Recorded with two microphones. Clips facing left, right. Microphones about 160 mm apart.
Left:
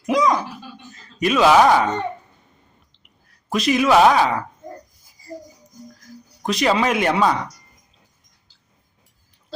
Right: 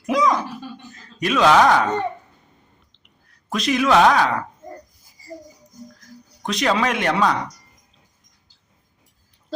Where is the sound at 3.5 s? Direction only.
5° left (ahead or behind).